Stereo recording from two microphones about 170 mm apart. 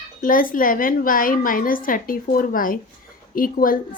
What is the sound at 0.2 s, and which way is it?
A woman's voice, 55° left (ahead or behind).